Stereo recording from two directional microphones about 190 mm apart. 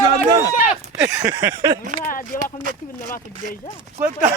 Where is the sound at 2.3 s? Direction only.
45° left (ahead or behind).